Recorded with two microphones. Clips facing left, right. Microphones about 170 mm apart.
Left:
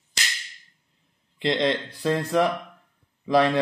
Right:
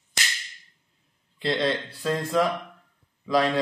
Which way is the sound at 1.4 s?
20° left (ahead or behind).